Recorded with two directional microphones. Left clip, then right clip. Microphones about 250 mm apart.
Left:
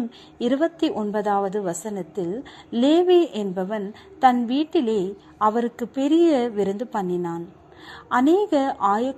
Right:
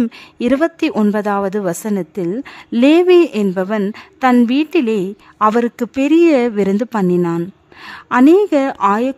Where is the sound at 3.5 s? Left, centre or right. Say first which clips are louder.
Right 9 dB; right.